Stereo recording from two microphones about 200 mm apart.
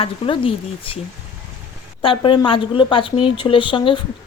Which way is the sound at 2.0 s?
25° left (ahead or behind).